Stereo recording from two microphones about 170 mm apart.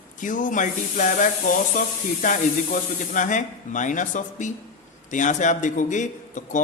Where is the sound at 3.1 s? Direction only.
50° left (ahead or behind).